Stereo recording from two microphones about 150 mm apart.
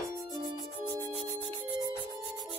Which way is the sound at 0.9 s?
30° right (ahead or behind).